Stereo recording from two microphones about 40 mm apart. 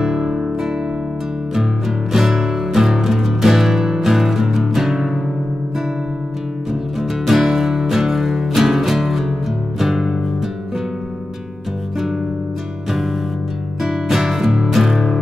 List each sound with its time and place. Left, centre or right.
0.0 s music: centre
1.5 s music: centre
7.0 s music: centre
13.8 s music: centre